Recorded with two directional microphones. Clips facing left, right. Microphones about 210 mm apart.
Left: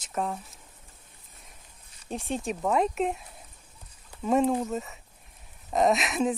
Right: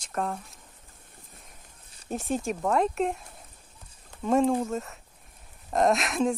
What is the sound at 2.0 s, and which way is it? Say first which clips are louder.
Speech: right 2 dB; centre (ahead or behind).